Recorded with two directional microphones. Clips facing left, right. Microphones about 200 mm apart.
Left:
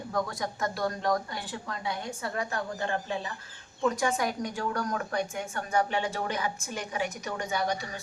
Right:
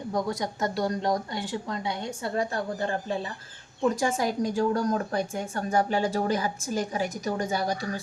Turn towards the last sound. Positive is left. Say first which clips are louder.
# right 3 dB
turn(degrees=-35)  # may be behind; listen again after turning